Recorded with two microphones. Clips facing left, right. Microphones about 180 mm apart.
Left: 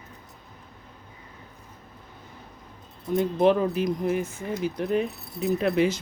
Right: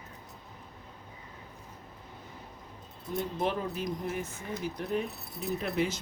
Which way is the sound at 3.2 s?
90° left.